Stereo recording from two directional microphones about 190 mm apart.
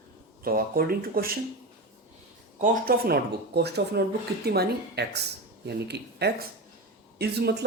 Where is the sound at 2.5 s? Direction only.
50° right (ahead or behind).